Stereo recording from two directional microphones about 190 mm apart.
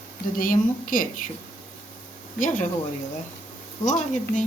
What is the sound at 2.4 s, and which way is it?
Speech, 45° left (ahead or behind).